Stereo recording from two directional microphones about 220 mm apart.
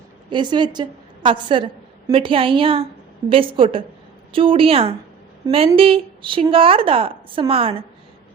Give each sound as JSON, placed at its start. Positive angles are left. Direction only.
{"t": 0.3, "sound": "a woman's voice", "side_deg": -20}